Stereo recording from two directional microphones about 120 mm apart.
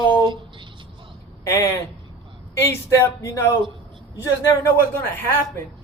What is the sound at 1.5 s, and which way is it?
A man's voice, 25° left (ahead or behind).